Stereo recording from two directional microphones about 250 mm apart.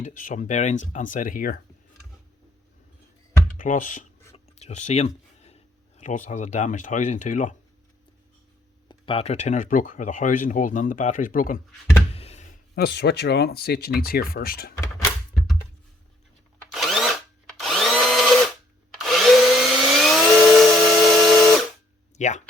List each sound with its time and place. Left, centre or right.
0.0 s speech: left
3.6 s speech: left
8.9 s speech: left
12.1 s a sound: left
12.7 s speech: left
16.7 s drill: centre
18.9 s a sound: centre
19.8 s tools: centre
22.2 s speech: left